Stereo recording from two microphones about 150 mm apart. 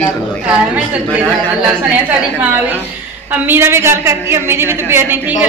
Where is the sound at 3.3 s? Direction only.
15° right (ahead or behind).